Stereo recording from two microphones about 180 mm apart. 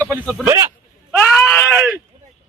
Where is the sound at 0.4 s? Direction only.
15° right (ahead or behind).